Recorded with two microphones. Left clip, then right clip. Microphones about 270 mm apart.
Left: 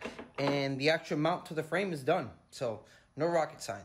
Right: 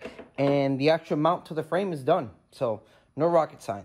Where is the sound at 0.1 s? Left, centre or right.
Centre.